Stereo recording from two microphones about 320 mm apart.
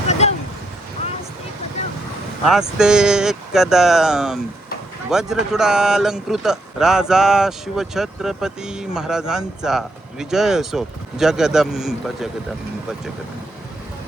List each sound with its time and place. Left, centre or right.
0.1 s vehicle: centre
2.5 s speech: centre